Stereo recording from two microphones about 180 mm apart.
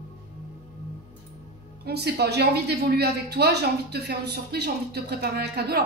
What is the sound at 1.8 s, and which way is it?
Speech, 65° right (ahead or behind).